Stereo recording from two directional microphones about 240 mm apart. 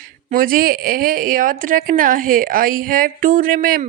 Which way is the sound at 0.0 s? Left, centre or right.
Right.